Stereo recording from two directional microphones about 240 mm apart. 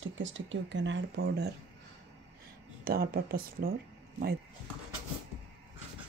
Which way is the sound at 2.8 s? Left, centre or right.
Right.